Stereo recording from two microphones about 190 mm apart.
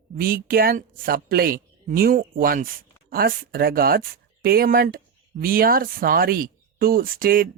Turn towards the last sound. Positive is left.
turn(degrees=-50)  # may be behind; listen again after turning